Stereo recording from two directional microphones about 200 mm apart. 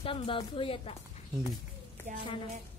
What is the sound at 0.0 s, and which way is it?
Speech, 25° left (ahead or behind).